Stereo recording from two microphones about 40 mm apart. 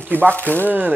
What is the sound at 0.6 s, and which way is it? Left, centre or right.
Speech, right.